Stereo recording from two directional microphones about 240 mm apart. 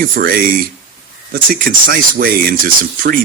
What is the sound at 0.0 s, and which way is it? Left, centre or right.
Speech, right.